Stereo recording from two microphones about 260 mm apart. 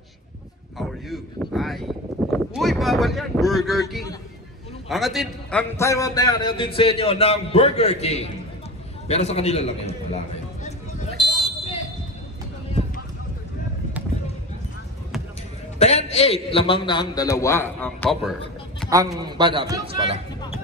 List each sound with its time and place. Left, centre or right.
0.7 s speech: centre
4.8 s a man's voice: centre; by 8.3 s left
9.0 s a sound: left
15.8 s a man's voice: left; by 18.3 s centre
18.9 s a man's voice: centre